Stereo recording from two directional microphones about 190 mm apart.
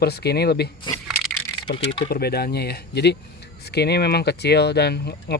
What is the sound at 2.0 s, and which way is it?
Speech, 55° left (ahead or behind).